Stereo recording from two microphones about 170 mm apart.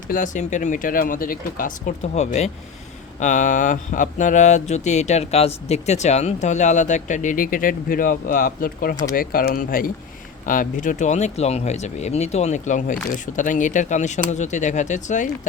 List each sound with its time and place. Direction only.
0.1 s speech: 50° left (ahead or behind)